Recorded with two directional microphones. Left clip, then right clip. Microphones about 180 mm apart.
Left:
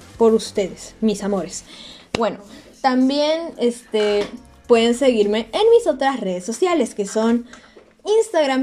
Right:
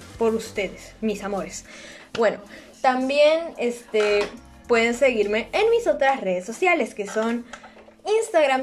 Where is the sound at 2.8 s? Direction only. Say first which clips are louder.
Even; 35° left (ahead or behind).